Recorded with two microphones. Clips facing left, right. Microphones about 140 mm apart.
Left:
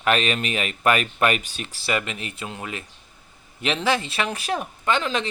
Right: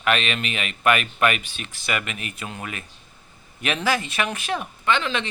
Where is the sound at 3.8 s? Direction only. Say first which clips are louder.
Even; 30° left (ahead or behind).